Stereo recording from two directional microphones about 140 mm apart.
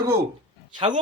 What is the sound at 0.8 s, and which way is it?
Speech, 40° right (ahead or behind).